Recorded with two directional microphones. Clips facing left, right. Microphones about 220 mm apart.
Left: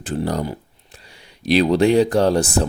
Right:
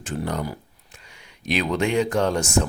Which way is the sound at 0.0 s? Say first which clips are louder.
Left 5 dB; 35° left (ahead or behind).